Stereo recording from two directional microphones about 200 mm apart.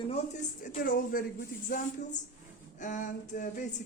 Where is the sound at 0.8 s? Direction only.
45° left (ahead or behind).